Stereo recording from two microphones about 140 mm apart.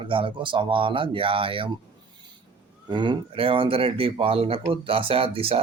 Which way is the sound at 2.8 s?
35° right (ahead or behind).